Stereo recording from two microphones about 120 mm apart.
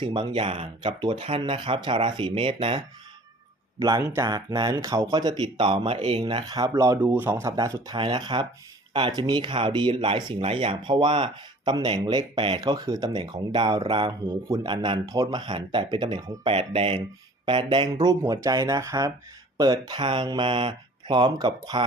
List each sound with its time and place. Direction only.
0.0 s speech: 50° right (ahead or behind); by 0.7 s 65° right (ahead or behind)
0.8 s speech: 40° right (ahead or behind)
3.8 s speech: 30° right (ahead or behind)
4.3 s speech: 35° right (ahead or behind)
7.0 s speech: 15° right (ahead or behind)
7.9 s speech: 40° right (ahead or behind)
14.3 s speech: 25° right (ahead or behind)
14.7 s speech: 45° right (ahead or behind)
15.0 s speech: 30° right (ahead or behind)